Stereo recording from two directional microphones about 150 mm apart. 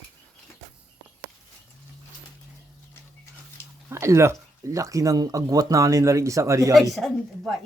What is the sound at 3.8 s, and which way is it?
Speech, 20° right (ahead or behind).